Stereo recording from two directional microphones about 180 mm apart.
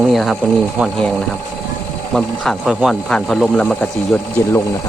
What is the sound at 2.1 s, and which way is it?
Speech, centre (ahead or behind).